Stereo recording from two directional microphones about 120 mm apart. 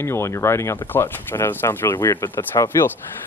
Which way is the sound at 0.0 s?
20° left (ahead or behind).